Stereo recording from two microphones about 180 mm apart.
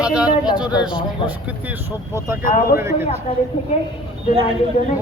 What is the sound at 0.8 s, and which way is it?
Speech, 25° left (ahead or behind).